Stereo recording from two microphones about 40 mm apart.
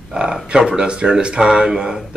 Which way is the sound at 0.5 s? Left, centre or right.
Centre.